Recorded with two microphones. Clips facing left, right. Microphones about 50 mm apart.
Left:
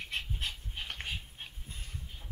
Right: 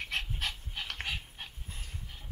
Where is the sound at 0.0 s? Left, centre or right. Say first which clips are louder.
Right 2 dB; right.